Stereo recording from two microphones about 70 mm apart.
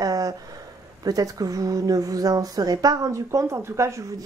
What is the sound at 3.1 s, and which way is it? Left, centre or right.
Speech, right.